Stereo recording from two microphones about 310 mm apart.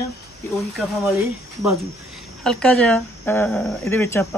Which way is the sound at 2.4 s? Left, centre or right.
Centre.